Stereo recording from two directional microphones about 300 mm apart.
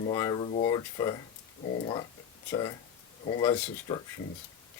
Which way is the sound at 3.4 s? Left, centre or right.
Centre.